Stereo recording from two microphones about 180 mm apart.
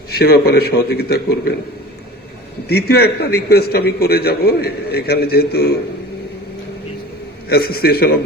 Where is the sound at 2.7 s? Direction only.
60° left (ahead or behind).